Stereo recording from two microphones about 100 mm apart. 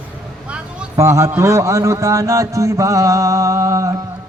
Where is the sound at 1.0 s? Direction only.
25° right (ahead or behind).